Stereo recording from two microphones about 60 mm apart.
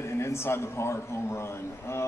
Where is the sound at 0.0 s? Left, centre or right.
Left.